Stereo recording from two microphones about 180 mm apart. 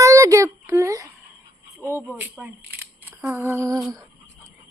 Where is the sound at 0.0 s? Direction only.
15° right (ahead or behind).